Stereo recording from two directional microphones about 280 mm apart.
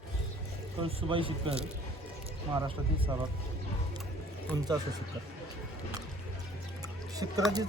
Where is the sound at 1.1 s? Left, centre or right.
Centre.